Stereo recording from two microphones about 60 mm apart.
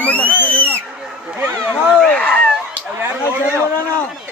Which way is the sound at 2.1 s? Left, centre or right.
Centre.